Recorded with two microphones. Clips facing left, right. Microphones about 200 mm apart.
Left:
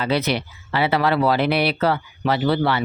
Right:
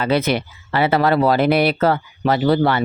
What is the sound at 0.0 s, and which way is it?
Speech, 50° right (ahead or behind).